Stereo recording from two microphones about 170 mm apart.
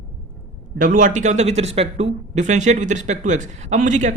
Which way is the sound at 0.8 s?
50° right (ahead or behind).